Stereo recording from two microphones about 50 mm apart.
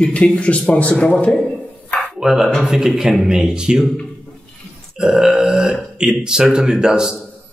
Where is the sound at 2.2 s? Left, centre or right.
Centre.